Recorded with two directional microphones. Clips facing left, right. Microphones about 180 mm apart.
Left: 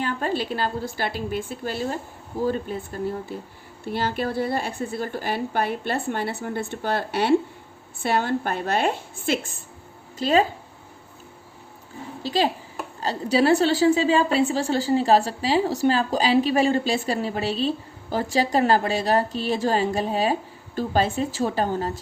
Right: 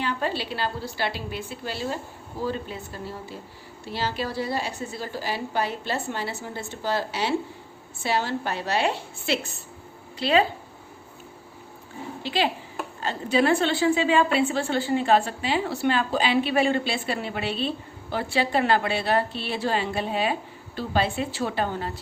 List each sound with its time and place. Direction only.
0.0 s a woman's voice: 45° left (ahead or behind)
12.2 s a woman's voice: 40° left (ahead or behind)